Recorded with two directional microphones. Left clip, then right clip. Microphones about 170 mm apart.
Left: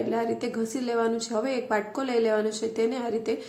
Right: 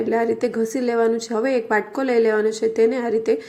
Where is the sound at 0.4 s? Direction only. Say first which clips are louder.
Right 8 dB; 20° right (ahead or behind).